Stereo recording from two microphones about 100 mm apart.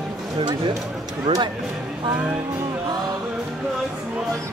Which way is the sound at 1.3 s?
70° right (ahead or behind).